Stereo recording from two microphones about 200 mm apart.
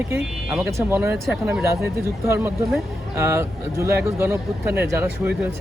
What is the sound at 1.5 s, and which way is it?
Speech, 15° right (ahead or behind).